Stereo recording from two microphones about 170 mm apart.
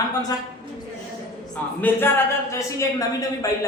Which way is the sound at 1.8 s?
15° left (ahead or behind).